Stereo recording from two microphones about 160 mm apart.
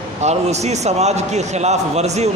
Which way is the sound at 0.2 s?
45° right (ahead or behind).